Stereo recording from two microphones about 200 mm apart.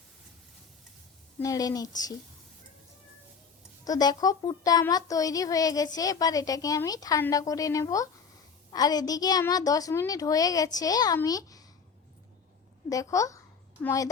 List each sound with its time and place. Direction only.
1.4 s a woman's voice: 15° left (ahead or behind)
3.8 s a child's voice: 20° left (ahead or behind)
12.9 s a child's voice: 15° left (ahead or behind)